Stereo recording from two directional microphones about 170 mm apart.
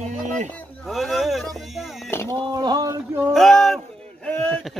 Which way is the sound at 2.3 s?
20° right (ahead or behind).